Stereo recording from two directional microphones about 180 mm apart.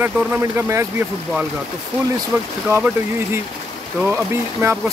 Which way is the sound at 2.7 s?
15° right (ahead or behind).